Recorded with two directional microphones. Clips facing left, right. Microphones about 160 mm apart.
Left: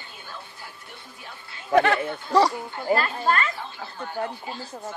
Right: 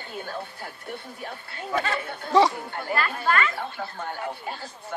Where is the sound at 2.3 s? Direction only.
Centre (ahead or behind).